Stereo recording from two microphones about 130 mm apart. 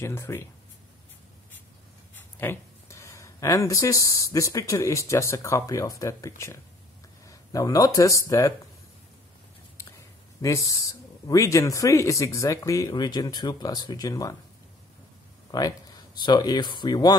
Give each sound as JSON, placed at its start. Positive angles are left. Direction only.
{"t": 0.0, "sound": "speech", "side_deg": 20}
{"t": 2.3, "sound": "speech", "side_deg": 15}
{"t": 10.4, "sound": "speech", "side_deg": 25}
{"t": 15.5, "sound": "speech", "side_deg": 30}